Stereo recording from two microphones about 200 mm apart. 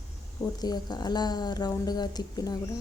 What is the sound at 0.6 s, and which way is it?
Speech, 20° left (ahead or behind).